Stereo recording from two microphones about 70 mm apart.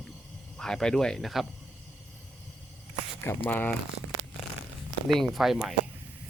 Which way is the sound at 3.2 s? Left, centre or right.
Left.